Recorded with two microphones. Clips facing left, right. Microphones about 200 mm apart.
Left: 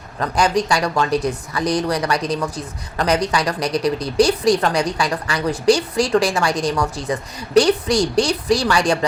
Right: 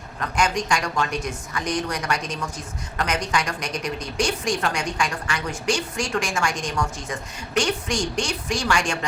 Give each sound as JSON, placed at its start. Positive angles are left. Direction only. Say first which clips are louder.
{"t": 0.2, "sound": "speech", "louder": "left 6 dB", "side_deg": 35}